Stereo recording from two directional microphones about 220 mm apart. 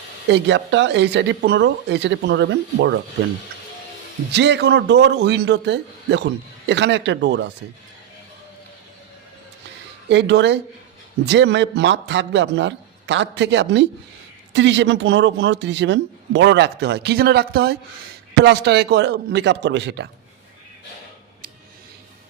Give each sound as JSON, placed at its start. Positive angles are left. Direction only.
{"t": 0.3, "sound": "speech", "side_deg": -55}
{"t": 4.3, "sound": "speech", "side_deg": -50}
{"t": 10.1, "sound": "speech", "side_deg": -55}